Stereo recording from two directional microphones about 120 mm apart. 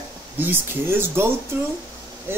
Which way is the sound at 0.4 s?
20° right (ahead or behind).